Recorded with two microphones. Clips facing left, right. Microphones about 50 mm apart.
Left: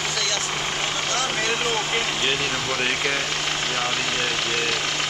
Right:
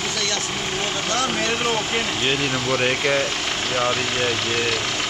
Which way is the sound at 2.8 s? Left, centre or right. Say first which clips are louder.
Right 4 dB; centre.